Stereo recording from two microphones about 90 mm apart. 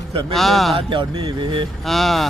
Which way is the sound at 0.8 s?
70° right (ahead or behind).